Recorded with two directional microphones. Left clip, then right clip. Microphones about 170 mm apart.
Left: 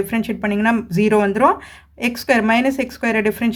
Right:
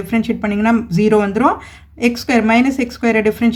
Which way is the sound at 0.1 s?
35° left (ahead or behind).